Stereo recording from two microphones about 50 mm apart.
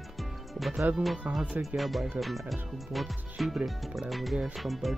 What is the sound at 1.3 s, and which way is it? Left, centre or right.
Speech, right.